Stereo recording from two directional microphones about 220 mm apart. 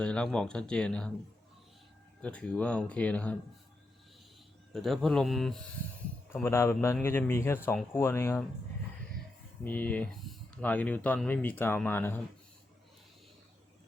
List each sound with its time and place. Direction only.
0.0 s speech: 5° left (ahead or behind)
2.2 s speech: 5° left (ahead or behind)
4.7 s speech: centre (ahead or behind)
6.3 s speech: 10° left (ahead or behind)
9.6 s speech: 5° left (ahead or behind)